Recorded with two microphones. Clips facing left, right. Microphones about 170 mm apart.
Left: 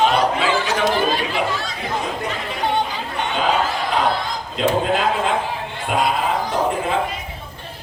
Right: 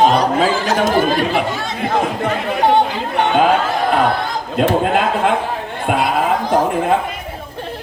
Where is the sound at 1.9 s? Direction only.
55° right (ahead or behind).